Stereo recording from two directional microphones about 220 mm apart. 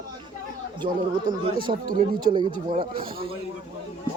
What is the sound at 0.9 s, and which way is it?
Speech, 40° right (ahead or behind).